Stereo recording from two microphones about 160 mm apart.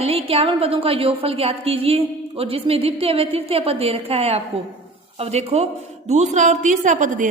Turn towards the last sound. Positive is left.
turn(degrees=-55)  # may be behind; listen again after turning